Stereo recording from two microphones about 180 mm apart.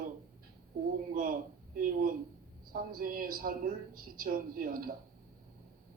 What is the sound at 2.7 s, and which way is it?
A man's voice, 55° right (ahead or behind).